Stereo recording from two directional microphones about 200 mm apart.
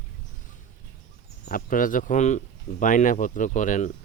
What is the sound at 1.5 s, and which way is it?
Speech, 45° left (ahead or behind).